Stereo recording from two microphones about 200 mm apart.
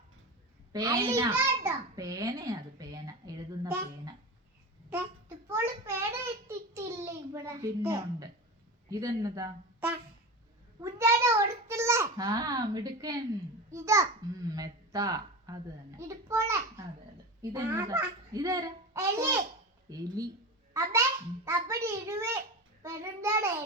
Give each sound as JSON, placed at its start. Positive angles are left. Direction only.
{"t": 0.7, "sound": "a woman's voice", "side_deg": -15}
{"t": 5.5, "sound": "a child's voice", "side_deg": -10}
{"t": 21.4, "sound": "a child's voice", "side_deg": -15}